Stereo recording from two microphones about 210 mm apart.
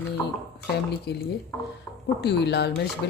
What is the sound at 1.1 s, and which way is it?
Speech, 50° left (ahead or behind).